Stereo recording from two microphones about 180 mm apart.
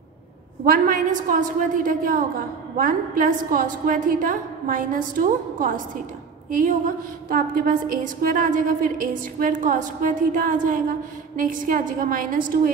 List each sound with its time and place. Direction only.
0.7 s a woman's voice: 50° right (ahead or behind)
7.2 s a woman's voice: 50° right (ahead or behind)